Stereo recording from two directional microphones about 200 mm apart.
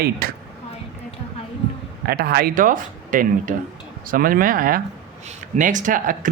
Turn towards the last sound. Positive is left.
turn(degrees=-40)  # may be behind; listen again after turning